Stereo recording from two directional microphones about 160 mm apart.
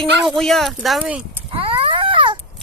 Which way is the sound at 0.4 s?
Centre (ahead or behind).